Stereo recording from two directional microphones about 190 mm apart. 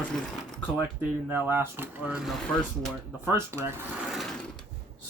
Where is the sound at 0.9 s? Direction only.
10° right (ahead or behind).